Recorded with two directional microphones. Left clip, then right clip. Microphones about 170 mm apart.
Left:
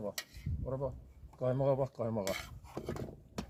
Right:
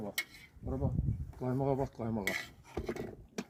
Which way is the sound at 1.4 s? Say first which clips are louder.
Left 2 dB; 55° left (ahead or behind).